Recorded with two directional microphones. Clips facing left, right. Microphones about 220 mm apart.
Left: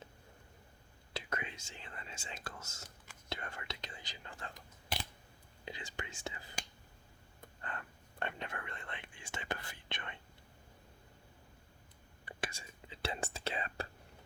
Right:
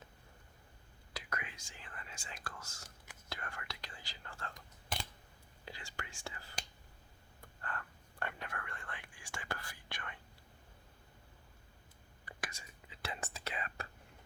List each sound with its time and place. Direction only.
1.1 s whispering: 25° left (ahead or behind)
3.2 s speech: 20° left (ahead or behind)
5.6 s speech: 20° left (ahead or behind)
12.2 s whispering: 25° left (ahead or behind)